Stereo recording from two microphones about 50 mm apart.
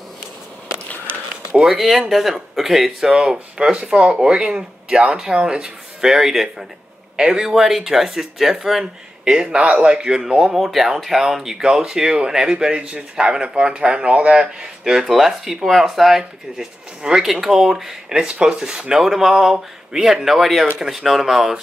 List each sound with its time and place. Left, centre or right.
1.6 s speech: centre
7.2 s speech: centre
7.5 s speech: centre
9.3 s speech: centre